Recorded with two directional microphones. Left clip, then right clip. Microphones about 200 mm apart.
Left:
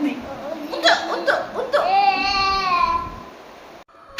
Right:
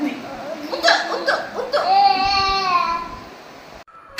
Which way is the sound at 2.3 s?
20° left (ahead or behind).